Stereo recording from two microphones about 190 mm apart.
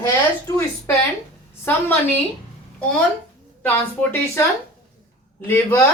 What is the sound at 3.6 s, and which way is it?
Speech, 10° left (ahead or behind).